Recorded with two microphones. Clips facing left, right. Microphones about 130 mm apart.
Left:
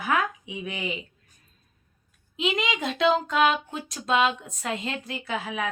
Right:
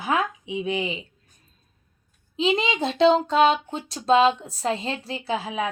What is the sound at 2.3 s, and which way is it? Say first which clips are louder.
Speech: right 4 dB; 30° right (ahead or behind).